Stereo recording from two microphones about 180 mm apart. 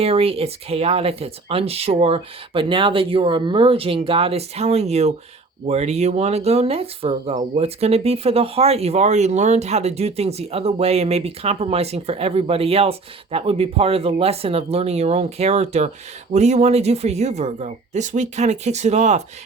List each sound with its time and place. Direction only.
0.0 s speech: 35° right (ahead or behind)